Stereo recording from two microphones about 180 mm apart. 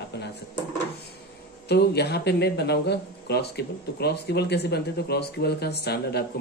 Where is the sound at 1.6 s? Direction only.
65° left (ahead or behind).